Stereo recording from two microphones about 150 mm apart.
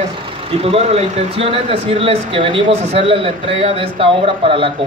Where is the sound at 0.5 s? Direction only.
40° right (ahead or behind).